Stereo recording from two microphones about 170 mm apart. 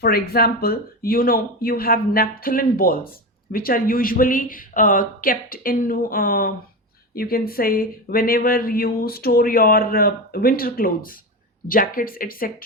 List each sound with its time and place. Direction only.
0.0 s speech: 65° left (ahead or behind)